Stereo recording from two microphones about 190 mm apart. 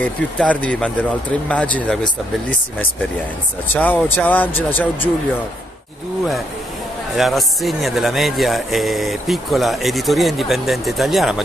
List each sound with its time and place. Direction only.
0.0 s speech: 5° left (ahead or behind)
3.7 s speech: 10° left (ahead or behind)
7.2 s speech: centre (ahead or behind)